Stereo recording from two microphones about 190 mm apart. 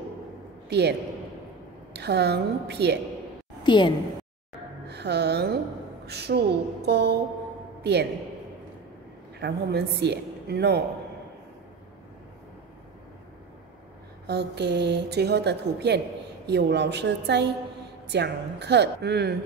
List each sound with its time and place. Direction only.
0.7 s a man's voice: 60° right (ahead or behind)
2.0 s a woman's voice: 60° right (ahead or behind)
3.6 s a woman's voice: 25° left (ahead or behind)
4.8 s music: 60° right (ahead or behind)
6.0 s a woman's voice: 60° right (ahead or behind)
9.4 s a woman's voice: 60° right (ahead or behind)
14.2 s a woman's voice: 60° right (ahead or behind)